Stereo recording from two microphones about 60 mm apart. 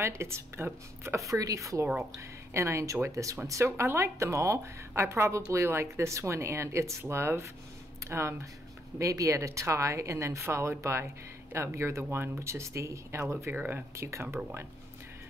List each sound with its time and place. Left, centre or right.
0.2 s a woman's voice: right
1.0 s a woman's voice: right
9.0 s a woman's voice: right
13.5 s speech: right
13.9 s a woman's voice: right